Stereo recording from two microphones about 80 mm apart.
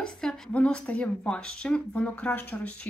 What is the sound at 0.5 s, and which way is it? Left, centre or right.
Speech, centre.